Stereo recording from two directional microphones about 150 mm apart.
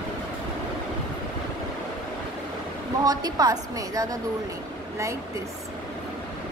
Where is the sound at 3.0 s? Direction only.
25° right (ahead or behind).